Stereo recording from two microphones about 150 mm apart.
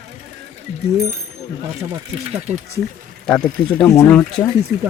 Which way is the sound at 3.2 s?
5° left (ahead or behind).